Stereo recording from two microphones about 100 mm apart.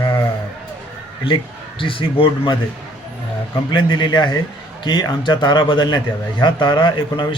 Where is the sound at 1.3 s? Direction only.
65° left (ahead or behind).